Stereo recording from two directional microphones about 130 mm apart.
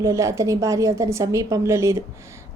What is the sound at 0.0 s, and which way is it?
A woman's voice, 25° right (ahead or behind).